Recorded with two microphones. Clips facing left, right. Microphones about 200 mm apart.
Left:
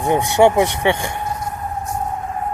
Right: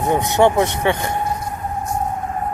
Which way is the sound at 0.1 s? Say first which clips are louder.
Left 2 dB; 15° left (ahead or behind).